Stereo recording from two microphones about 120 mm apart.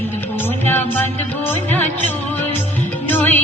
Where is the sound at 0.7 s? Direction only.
15° left (ahead or behind).